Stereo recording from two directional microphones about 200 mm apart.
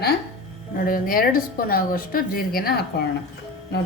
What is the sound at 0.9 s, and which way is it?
A woman's voice, 45° left (ahead or behind).